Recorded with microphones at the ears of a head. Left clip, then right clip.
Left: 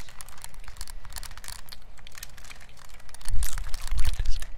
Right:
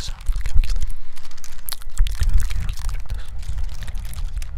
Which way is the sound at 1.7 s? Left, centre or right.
Right.